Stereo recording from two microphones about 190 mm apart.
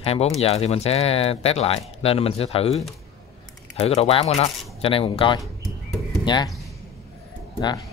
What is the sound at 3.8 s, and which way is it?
Speech, 30° left (ahead or behind).